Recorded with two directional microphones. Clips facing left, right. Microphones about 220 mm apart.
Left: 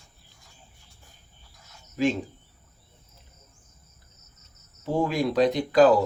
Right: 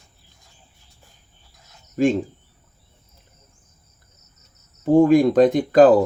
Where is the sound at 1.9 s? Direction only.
50° right (ahead or behind).